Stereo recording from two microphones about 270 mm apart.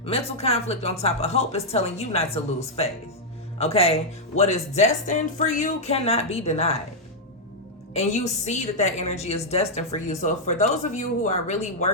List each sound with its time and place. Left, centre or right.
0.0 s a woman's voice: left
7.9 s a woman's voice: left